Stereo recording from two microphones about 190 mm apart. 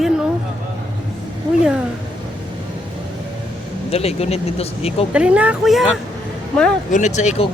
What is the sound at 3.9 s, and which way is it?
Speech, 30° left (ahead or behind).